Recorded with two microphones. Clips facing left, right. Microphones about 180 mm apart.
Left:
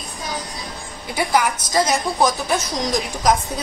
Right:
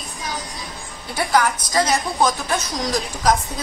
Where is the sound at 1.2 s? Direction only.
10° left (ahead or behind).